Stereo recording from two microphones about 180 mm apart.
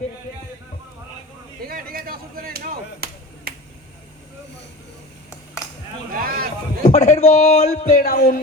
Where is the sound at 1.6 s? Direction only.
55° right (ahead or behind).